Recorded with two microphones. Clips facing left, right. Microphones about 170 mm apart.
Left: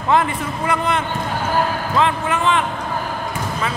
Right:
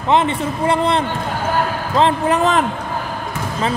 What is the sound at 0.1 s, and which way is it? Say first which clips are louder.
A man's voice: right 2 dB; 25° right (ahead or behind).